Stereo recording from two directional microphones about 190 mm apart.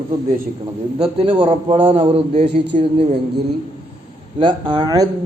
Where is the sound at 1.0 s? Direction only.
30° right (ahead or behind).